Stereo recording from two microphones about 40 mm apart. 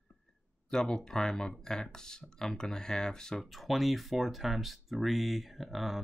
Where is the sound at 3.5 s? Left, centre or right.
Centre.